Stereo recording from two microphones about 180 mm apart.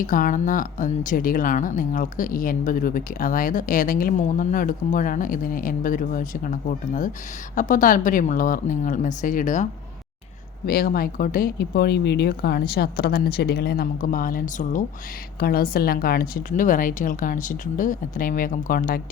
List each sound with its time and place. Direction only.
0.0 s speech: 50° left (ahead or behind)
10.7 s speech: 55° left (ahead or behind)
15.4 s speech: 55° left (ahead or behind)